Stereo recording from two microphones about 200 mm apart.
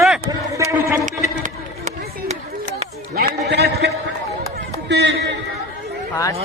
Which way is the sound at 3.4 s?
55° right (ahead or behind).